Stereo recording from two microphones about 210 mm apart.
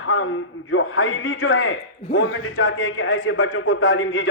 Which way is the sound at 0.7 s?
70° left (ahead or behind).